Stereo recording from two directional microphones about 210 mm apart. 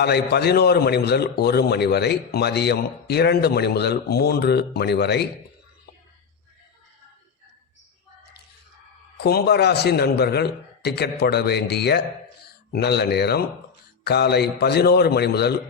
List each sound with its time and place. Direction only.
0.0 s a man's voice: 50° left (ahead or behind)
9.2 s a man's voice: 50° left (ahead or behind)